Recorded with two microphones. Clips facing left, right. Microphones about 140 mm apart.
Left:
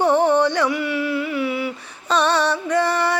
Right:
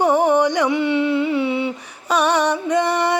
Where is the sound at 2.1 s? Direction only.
15° right (ahead or behind).